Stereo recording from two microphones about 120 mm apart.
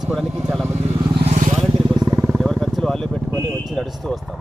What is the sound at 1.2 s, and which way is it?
Vehicle, 75° right (ahead or behind).